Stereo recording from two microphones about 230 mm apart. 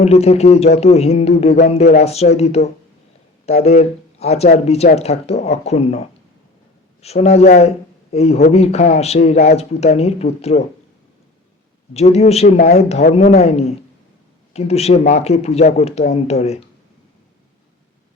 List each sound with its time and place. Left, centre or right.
0.0 s speech: left
11.9 s speech: left